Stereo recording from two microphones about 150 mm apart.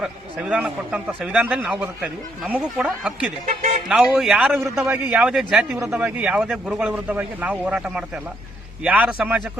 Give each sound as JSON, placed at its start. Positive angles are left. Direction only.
{"t": 0.0, "sound": "a man's voice", "side_deg": -10}
{"t": 3.4, "sound": "speech", "side_deg": -60}
{"t": 3.8, "sound": "a man's voice", "side_deg": -5}
{"t": 4.7, "sound": "a man's voice", "side_deg": -15}
{"t": 5.7, "sound": "speech", "side_deg": -20}
{"t": 6.0, "sound": "a man's voice", "side_deg": -10}